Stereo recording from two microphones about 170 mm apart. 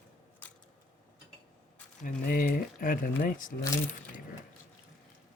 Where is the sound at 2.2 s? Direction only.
55° left (ahead or behind).